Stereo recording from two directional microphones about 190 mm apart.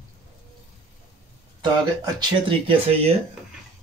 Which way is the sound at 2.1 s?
30° right (ahead or behind).